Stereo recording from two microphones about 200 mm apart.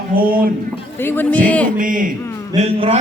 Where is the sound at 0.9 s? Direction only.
10° left (ahead or behind).